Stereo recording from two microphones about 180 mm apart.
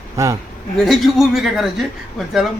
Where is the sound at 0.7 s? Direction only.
Centre (ahead or behind).